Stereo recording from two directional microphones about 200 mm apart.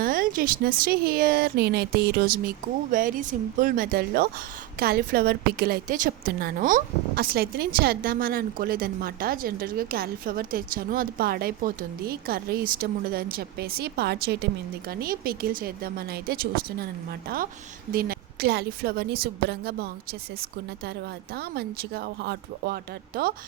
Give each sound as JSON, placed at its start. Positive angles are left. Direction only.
{"t": 0.0, "sound": "a woman's voice", "side_deg": -45}
{"t": 21.3, "sound": "a woman's voice", "side_deg": -50}